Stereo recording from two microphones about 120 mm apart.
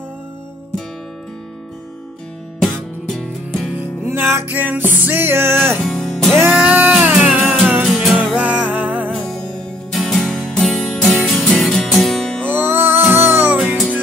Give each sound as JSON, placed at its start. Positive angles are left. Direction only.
{"t": 2.6, "sound": "music", "side_deg": 5}
{"t": 4.0, "sound": "music", "side_deg": -20}
{"t": 5.8, "sound": "music", "side_deg": 5}
{"t": 6.6, "sound": "music", "side_deg": -10}
{"t": 7.8, "sound": "music", "side_deg": 0}
{"t": 9.1, "sound": "music", "side_deg": 5}
{"t": 12.4, "sound": "music", "side_deg": -20}
{"t": 13.6, "sound": "music", "side_deg": -5}